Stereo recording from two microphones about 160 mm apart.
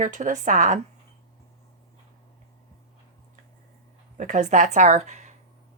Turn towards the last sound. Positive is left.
turn(degrees=-45)  # may be behind; listen again after turning